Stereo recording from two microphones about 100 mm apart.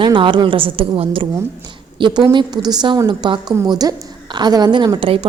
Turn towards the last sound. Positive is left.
turn(degrees=-60)  # may be behind; listen again after turning